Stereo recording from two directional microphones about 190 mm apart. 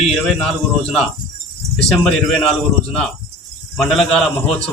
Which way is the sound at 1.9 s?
Centre (ahead or behind).